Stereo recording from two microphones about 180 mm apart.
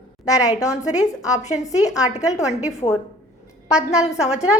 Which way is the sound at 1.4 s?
40° left (ahead or behind).